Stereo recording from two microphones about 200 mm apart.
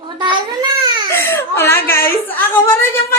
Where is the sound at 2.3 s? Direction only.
10° left (ahead or behind).